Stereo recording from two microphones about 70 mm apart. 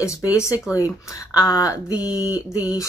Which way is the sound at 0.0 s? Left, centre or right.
Left.